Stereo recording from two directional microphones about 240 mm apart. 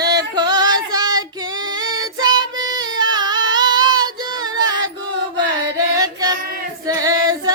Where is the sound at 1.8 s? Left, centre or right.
Centre.